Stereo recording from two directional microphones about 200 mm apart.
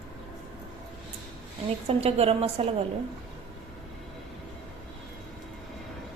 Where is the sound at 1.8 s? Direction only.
30° right (ahead or behind).